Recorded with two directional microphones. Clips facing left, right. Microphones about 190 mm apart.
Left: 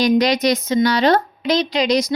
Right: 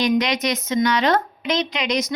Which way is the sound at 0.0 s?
35° left (ahead or behind).